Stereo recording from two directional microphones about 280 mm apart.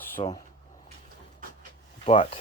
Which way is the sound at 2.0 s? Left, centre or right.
Left.